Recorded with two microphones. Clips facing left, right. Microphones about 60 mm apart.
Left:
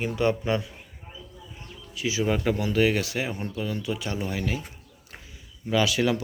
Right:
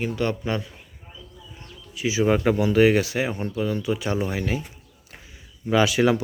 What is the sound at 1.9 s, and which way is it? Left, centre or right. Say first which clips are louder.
Speech: right 5 dB; centre.